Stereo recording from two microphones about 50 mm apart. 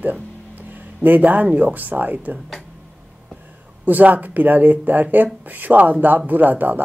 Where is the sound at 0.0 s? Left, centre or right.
Right.